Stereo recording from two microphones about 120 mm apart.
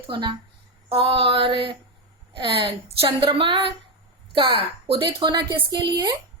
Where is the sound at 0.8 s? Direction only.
50° right (ahead or behind).